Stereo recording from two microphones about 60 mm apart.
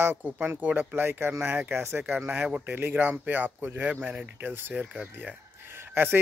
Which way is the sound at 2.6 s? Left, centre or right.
Right.